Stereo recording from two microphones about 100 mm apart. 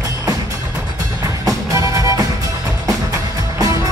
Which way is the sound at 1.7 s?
35° right (ahead or behind).